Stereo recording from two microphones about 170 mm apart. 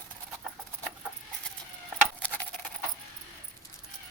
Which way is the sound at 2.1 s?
10° left (ahead or behind).